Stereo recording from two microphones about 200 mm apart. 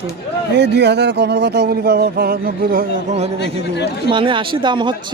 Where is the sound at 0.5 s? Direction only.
60° right (ahead or behind).